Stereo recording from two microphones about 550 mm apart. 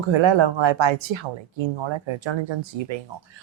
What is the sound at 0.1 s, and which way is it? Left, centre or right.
Speech, right.